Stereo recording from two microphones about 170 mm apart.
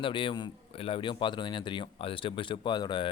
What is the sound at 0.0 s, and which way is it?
A man's voice, 30° left (ahead or behind).